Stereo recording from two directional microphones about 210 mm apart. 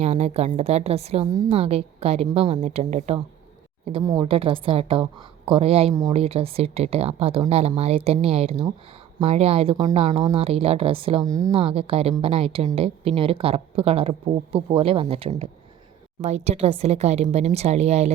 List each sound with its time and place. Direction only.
0.0 s a woman's voice: 30° right (ahead or behind)
4.0 s speech: 15° right (ahead or behind)
4.3 s a woman's voice: 25° right (ahead or behind)
5.9 s speech: 15° right (ahead or behind)
6.1 s a woman's voice: 30° right (ahead or behind)